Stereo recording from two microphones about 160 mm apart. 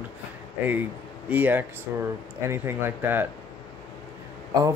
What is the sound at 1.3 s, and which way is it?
Speech, 10° right (ahead or behind).